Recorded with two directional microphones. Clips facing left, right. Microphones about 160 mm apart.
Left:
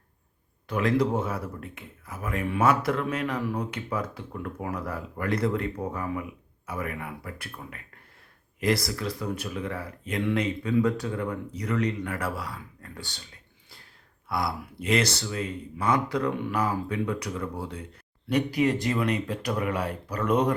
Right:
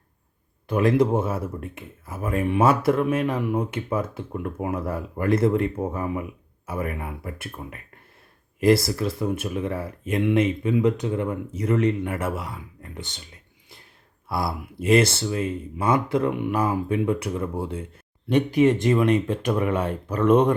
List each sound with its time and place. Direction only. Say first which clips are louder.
0.7 s speech: right 5 dB; 25° right (ahead or behind)